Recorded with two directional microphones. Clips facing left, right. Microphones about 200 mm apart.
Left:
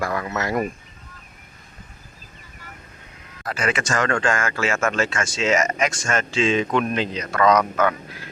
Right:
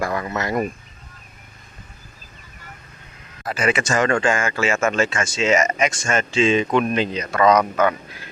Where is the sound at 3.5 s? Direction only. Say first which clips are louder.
Right 3 dB; 5° right (ahead or behind).